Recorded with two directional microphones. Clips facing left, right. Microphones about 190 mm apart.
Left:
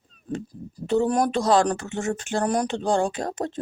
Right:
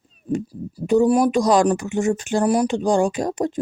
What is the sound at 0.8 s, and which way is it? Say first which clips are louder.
Speech: right 5 dB; 10° right (ahead or behind).